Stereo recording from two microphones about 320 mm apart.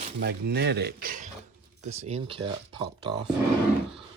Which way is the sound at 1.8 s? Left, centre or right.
Centre.